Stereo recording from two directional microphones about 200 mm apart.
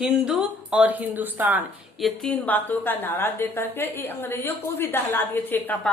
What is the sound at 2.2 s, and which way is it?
A woman's voice, 5° left (ahead or behind).